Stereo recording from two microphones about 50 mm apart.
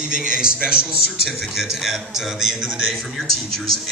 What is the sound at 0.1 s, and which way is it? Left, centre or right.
Speech, centre.